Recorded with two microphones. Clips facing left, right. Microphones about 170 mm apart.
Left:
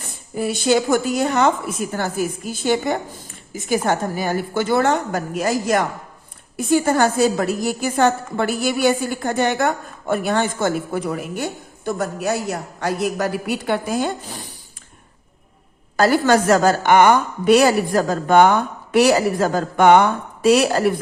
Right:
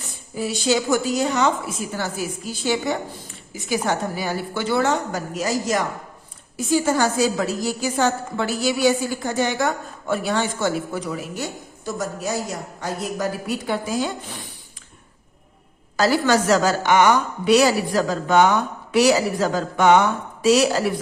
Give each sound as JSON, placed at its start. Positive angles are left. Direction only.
{"t": 0.0, "sound": "a woman's voice", "side_deg": 55}
{"t": 16.0, "sound": "a woman's voice", "side_deg": 50}